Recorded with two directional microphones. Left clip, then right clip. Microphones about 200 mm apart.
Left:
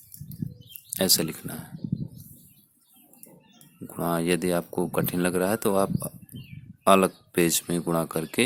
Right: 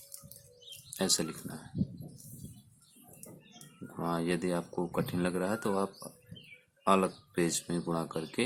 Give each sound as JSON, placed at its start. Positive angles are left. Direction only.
{"t": 0.9, "sound": "speech", "side_deg": 40}
{"t": 3.9, "sound": "speech", "side_deg": 45}